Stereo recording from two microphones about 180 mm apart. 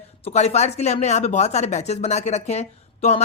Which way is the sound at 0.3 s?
35° left (ahead or behind).